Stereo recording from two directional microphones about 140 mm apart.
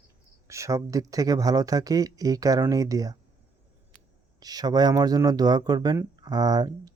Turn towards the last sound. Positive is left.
turn(degrees=-30)  # may be behind; listen again after turning